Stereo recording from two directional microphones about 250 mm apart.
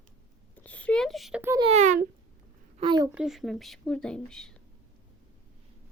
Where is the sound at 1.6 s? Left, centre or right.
Right.